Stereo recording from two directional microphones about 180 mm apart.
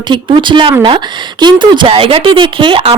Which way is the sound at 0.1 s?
25° right (ahead or behind).